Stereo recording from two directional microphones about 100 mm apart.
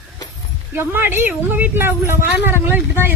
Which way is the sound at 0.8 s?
20° right (ahead or behind).